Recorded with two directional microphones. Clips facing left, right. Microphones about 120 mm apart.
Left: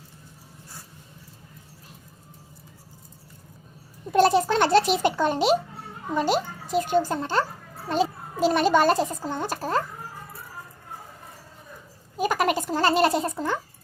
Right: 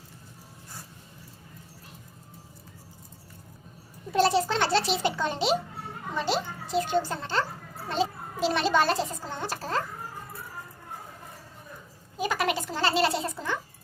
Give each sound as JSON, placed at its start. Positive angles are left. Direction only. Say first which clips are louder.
{"t": 4.1, "sound": "a sound", "louder": "left 4 dB", "side_deg": 50}
{"t": 6.1, "sound": "a child's voice", "louder": "left 5 dB", "side_deg": 45}
{"t": 12.1, "sound": "a child's voice", "louder": "left 4 dB", "side_deg": 50}